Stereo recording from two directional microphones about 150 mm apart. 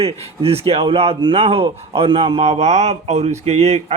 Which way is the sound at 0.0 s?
40° right (ahead or behind).